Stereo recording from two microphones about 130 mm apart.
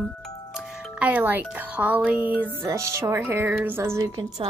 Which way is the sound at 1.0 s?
10° right (ahead or behind).